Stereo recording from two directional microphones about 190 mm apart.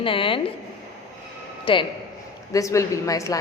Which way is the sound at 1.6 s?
25° left (ahead or behind).